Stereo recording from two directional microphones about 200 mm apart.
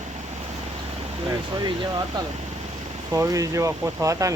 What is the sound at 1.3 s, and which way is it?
Speech, 20° right (ahead or behind).